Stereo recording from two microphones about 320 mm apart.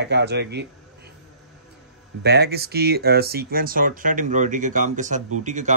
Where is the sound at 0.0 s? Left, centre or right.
Right.